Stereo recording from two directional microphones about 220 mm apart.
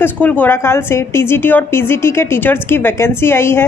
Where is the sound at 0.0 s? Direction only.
5° left (ahead or behind).